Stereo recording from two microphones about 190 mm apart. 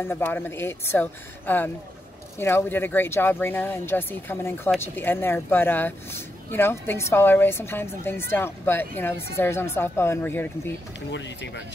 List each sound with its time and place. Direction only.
0.0 s speech: 10° left (ahead or behind)
11.1 s speech: 70° left (ahead or behind)